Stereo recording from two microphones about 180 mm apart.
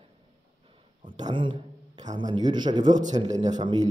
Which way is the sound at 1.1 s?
25° right (ahead or behind).